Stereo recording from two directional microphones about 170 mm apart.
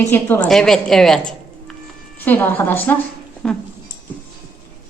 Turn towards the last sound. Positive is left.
turn(degrees=5)  # may be behind; listen again after turning